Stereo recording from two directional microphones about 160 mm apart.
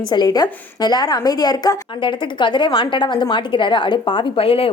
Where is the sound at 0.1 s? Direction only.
25° left (ahead or behind).